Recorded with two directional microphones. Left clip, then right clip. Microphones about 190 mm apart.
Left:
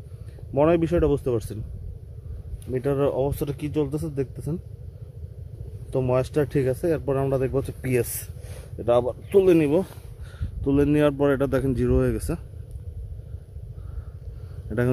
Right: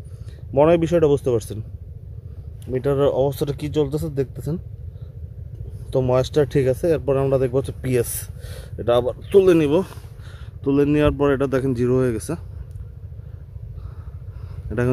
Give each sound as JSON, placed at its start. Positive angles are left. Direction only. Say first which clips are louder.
{"t": 0.5, "sound": "speech", "louder": "right 4 dB", "side_deg": 10}
{"t": 2.7, "sound": "speech", "louder": "right 4 dB", "side_deg": 10}
{"t": 5.9, "sound": "speech", "louder": "right 4 dB", "side_deg": 10}